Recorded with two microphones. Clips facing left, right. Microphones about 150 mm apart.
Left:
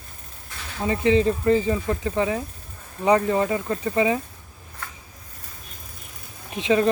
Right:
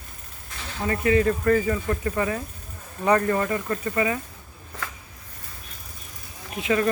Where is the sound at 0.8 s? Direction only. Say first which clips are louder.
Left 2 dB; 20° left (ahead or behind).